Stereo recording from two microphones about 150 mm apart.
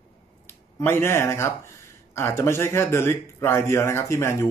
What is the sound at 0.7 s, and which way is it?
A man's voice, 15° left (ahead or behind).